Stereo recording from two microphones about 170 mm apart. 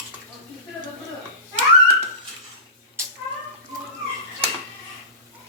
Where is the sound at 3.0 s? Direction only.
15° right (ahead or behind).